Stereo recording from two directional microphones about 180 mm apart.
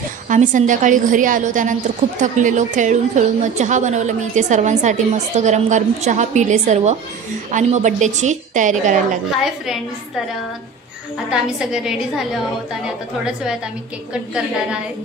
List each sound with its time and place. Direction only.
0.3 s a woman's voice: 45° right (ahead or behind)
11.2 s a woman's voice: 5° right (ahead or behind)
14.1 s a woman's voice: 5° right (ahead or behind)